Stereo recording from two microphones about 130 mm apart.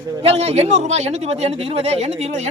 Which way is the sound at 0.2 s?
50° right (ahead or behind).